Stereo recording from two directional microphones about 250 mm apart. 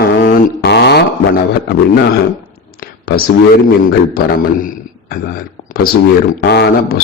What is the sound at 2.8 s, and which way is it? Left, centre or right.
Clicking, left.